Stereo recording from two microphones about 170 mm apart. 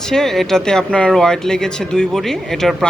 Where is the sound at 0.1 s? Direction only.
Centre (ahead or behind).